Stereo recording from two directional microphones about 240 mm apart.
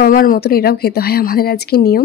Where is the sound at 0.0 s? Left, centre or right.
Left.